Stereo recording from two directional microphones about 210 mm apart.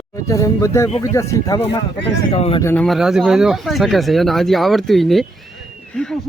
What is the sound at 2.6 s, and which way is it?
Speech, 5° left (ahead or behind).